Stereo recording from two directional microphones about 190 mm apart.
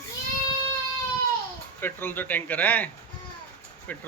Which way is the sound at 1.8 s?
10° left (ahead or behind).